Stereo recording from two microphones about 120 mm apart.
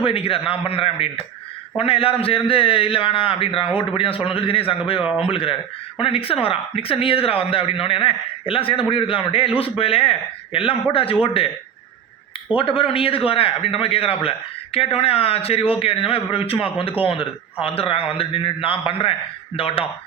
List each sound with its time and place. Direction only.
0.0 s a man's voice: 50° left (ahead or behind)
12.5 s a man's voice: 50° left (ahead or behind)